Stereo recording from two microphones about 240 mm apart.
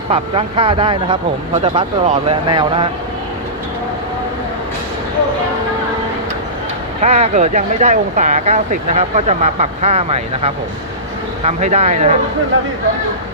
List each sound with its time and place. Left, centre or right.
0.1 s speech: right
7.0 s speech: right